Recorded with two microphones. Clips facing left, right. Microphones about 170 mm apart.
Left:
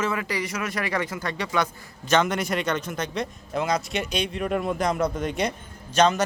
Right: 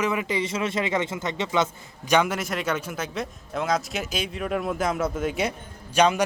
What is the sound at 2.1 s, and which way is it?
A man's voice, 10° right (ahead or behind).